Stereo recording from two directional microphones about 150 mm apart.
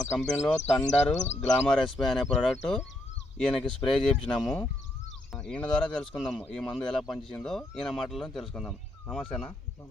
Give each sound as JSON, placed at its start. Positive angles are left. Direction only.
{"t": 0.2, "sound": "speech", "side_deg": 5}
{"t": 1.1, "sound": "speech", "side_deg": 50}
{"t": 1.5, "sound": "speech", "side_deg": 5}
{"t": 3.3, "sound": "speech", "side_deg": 5}